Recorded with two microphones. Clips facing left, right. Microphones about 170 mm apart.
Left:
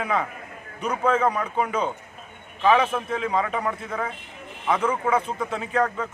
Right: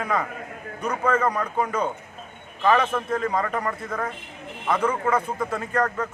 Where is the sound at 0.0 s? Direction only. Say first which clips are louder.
Even; 5° left (ahead or behind).